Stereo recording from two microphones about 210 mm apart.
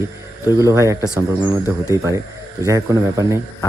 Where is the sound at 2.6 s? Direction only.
15° right (ahead or behind).